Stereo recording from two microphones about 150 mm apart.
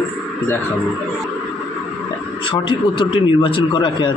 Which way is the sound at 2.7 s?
35° left (ahead or behind).